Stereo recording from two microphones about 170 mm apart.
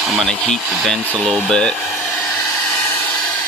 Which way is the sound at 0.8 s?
5° left (ahead or behind).